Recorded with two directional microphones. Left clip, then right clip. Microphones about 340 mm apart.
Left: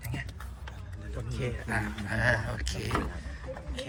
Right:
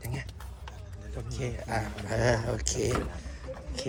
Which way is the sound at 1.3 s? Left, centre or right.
Centre.